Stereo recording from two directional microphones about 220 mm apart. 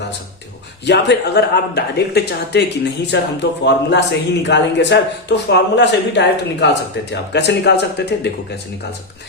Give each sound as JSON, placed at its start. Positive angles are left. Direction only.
{"t": 0.9, "sound": "speech", "side_deg": 50}